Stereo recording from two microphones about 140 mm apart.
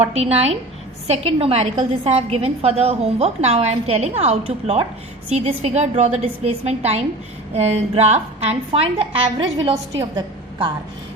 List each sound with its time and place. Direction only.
0.0 s a woman's voice: 45° right (ahead or behind)